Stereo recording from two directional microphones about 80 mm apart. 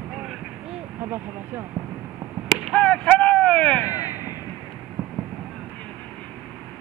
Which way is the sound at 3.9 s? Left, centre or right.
Left.